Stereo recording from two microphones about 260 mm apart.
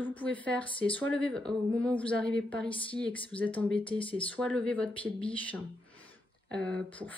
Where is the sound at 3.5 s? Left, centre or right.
Centre.